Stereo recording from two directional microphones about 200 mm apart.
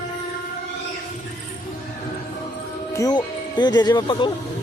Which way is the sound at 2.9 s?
20° left (ahead or behind).